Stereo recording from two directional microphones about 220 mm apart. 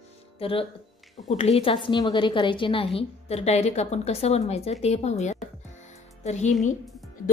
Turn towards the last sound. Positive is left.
turn(degrees=30)  # may be behind; listen again after turning